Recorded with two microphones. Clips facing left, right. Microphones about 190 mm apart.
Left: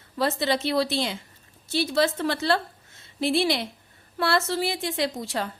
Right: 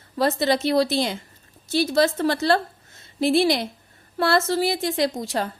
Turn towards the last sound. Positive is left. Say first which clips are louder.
# right 4 dB
turn(degrees=-40)  # may be behind; listen again after turning